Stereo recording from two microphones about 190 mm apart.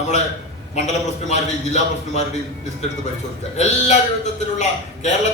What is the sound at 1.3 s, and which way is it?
Speech, 35° left (ahead or behind).